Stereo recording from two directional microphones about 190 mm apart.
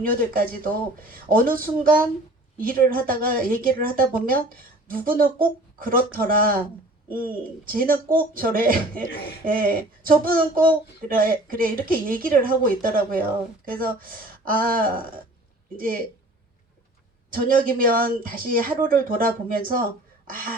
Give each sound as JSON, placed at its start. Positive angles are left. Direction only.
{"t": 0.0, "sound": "speech", "side_deg": -50}
{"t": 17.3, "sound": "speech", "side_deg": -50}